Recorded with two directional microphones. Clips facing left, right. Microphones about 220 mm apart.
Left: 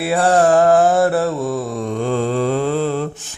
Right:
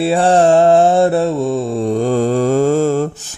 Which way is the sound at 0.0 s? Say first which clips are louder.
Right 3 dB; 25° right (ahead or behind).